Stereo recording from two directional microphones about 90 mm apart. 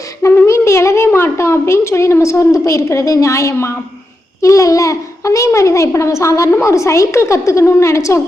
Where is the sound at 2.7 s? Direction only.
35° left (ahead or behind).